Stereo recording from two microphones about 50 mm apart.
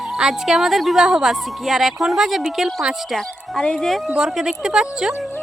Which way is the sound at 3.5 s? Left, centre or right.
Centre.